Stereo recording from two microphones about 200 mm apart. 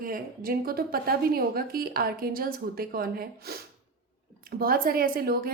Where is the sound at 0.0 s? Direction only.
45° right (ahead or behind).